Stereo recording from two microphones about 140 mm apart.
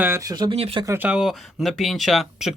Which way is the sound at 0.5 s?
40° right (ahead or behind).